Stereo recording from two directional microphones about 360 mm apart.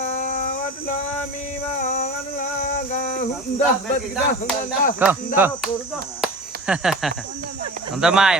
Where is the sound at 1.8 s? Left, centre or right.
Left.